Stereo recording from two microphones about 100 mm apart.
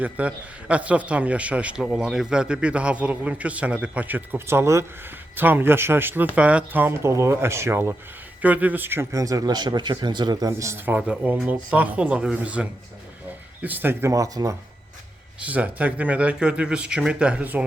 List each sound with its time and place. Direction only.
0.0 s a man's voice: 15° right (ahead or behind)
9.1 s a man's voice: 35° right (ahead or behind)
10.6 s a man's voice: 25° right (ahead or behind)
14.1 s speech: 35° right (ahead or behind)
15.4 s a man's voice: 15° right (ahead or behind)